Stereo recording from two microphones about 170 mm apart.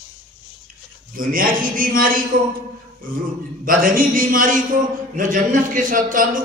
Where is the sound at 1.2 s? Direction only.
55° right (ahead or behind).